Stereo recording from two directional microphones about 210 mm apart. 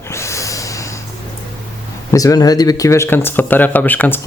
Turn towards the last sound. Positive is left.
turn(degrees=10)  # may be behind; listen again after turning